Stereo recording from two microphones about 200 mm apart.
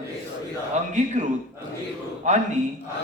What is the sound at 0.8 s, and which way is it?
A man's voice, 35° right (ahead or behind).